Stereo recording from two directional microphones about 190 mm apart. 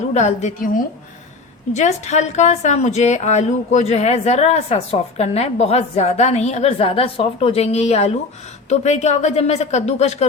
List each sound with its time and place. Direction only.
0.1 s a woman's voice: 35° left (ahead or behind)